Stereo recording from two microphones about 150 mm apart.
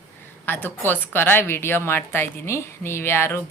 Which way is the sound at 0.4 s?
15° left (ahead or behind).